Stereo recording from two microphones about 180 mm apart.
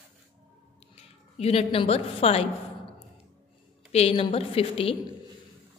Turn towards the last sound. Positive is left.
turn(degrees=30)  # may be behind; listen again after turning